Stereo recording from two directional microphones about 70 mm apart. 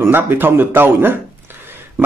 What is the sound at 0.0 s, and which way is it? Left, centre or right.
A man's voice, right.